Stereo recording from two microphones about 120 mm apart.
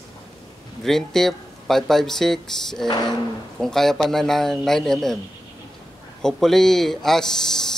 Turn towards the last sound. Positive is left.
turn(degrees=5)  # may be behind; listen again after turning